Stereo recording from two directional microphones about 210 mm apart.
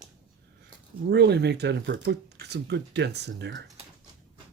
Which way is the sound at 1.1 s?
55° right (ahead or behind).